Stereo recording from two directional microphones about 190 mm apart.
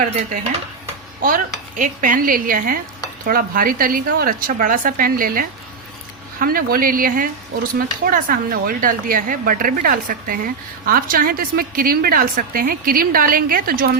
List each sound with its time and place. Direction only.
1.2 s speech: 45° right (ahead or behind)